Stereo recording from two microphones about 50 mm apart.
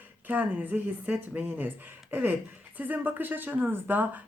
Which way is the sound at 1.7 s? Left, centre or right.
Right.